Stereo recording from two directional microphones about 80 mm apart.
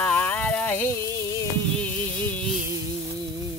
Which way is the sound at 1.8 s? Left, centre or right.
Centre.